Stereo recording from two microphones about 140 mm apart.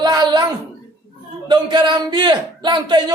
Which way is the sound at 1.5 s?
30° right (ahead or behind).